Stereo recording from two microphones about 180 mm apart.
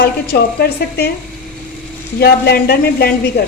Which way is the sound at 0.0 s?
60° left (ahead or behind).